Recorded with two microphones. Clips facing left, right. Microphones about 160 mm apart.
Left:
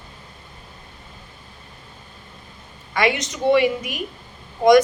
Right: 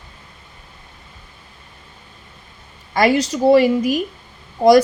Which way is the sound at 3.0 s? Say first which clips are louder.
Right 6 dB; 35° right (ahead or behind).